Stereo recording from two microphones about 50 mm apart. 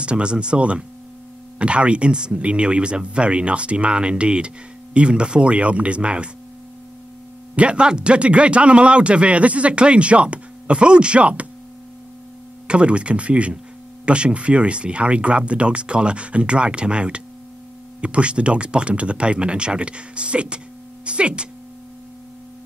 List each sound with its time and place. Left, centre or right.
0.0 s a man's voice: right
7.5 s a man's voice: right
12.6 s a man's voice: right